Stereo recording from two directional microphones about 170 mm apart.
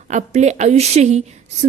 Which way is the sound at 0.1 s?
45° right (ahead or behind).